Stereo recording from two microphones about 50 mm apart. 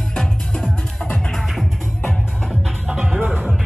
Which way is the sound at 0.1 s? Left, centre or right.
Centre.